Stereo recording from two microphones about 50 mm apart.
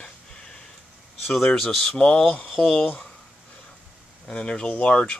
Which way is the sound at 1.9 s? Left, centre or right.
Centre.